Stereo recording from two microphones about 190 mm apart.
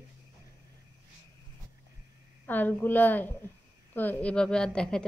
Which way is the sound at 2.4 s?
10° left (ahead or behind).